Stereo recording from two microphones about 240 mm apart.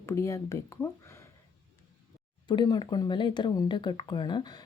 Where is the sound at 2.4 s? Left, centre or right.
Centre.